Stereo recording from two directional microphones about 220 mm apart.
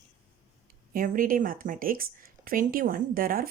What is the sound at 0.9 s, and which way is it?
Speech, 40° right (ahead or behind).